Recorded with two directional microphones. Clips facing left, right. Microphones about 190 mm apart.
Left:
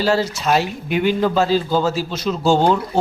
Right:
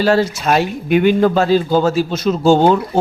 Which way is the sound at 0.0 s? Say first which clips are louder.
Right 4 dB; 55° right (ahead or behind).